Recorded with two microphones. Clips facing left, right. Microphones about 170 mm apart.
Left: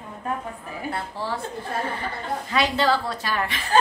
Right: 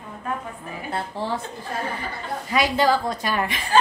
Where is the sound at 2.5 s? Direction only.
10° right (ahead or behind).